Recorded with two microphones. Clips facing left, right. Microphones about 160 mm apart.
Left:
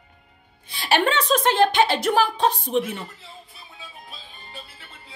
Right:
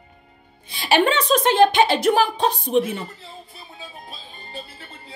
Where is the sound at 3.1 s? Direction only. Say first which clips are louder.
Right 4 dB; 35° right (ahead or behind).